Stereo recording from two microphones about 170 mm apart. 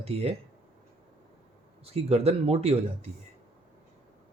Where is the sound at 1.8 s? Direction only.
35° right (ahead or behind).